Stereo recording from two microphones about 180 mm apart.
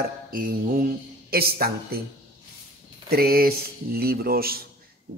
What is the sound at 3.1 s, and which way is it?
A man's voice, 55° right (ahead or behind).